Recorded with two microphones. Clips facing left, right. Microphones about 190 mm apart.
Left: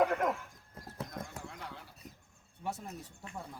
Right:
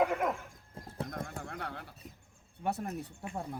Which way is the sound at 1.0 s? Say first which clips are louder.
Right 4 dB; 55° right (ahead or behind).